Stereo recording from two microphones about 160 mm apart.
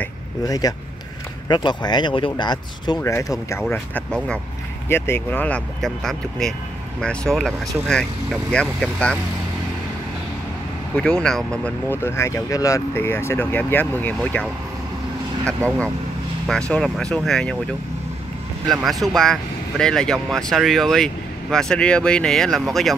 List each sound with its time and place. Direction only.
0.5 s speech: 20° left (ahead or behind); by 9.2 s 5° left (ahead or behind)
11.0 s speech: 5° left (ahead or behind)
18.7 s speech: centre (ahead or behind)